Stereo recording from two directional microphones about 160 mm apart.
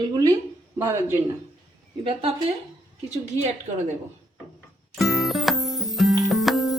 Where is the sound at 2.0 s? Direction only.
35° right (ahead or behind).